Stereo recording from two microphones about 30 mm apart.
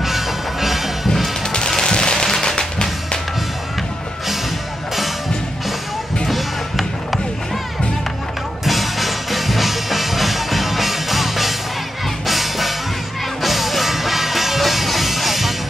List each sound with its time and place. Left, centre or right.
0.0 s music: centre
1.0 s music: centre
1.8 s music: left
6.2 s music: centre
8.6 s music: centre